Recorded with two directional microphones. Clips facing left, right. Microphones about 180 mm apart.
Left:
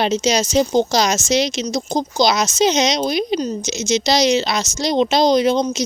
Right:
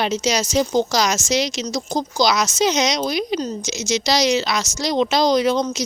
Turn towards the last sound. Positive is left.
turn(degrees=20)  # may be behind; listen again after turning